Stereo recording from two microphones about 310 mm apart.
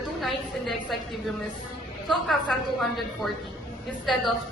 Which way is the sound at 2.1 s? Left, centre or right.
Centre.